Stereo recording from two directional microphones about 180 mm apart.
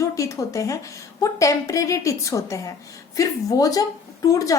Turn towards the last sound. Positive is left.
turn(degrees=20)  # may be behind; listen again after turning